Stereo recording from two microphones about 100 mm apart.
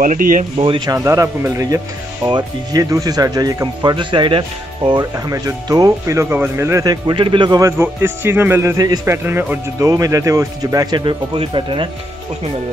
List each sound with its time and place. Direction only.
0.6 s speech: 60° right (ahead or behind)
0.8 s speech: 30° right (ahead or behind)
2.2 s speech: 40° right (ahead or behind)
3.9 s speech: 55° right (ahead or behind)
5.1 s speech: 35° right (ahead or behind)
6.3 s speech: 25° right (ahead or behind); by 7.2 s 40° right (ahead or behind)
7.2 s speech: 55° right (ahead or behind)
7.8 s speech: 25° right (ahead or behind)
9.0 s speech: 25° right (ahead or behind)
9.8 s speech: 35° right (ahead or behind)
11.0 s speech: 55° right (ahead or behind)